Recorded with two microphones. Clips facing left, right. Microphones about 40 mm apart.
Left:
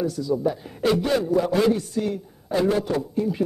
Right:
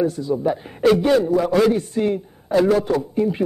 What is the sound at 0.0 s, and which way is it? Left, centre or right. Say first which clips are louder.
A man's voice: right 3 dB; right.